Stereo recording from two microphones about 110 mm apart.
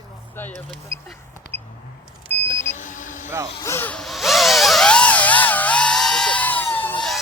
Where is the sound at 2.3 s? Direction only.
15° left (ahead or behind).